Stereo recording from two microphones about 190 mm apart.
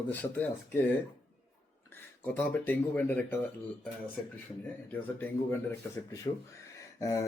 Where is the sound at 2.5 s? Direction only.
10° left (ahead or behind).